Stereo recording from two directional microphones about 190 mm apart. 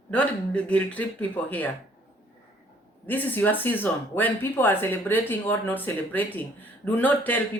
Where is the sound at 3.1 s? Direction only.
10° left (ahead or behind).